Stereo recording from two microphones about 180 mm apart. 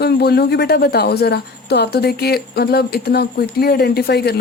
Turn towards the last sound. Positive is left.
turn(degrees=65)  # may be behind; listen again after turning